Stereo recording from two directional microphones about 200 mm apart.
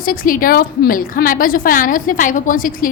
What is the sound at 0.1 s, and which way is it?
A woman's voice, 45° left (ahead or behind).